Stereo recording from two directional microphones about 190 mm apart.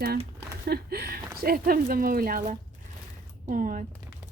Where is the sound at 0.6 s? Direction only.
55° right (ahead or behind).